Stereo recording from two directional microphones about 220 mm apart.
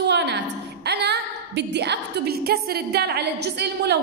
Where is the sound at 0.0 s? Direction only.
50° right (ahead or behind).